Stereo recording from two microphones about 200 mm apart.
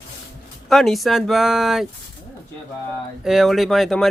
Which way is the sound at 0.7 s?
Centre (ahead or behind).